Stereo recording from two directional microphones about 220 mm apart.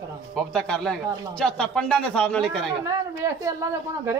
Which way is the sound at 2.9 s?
15° right (ahead or behind).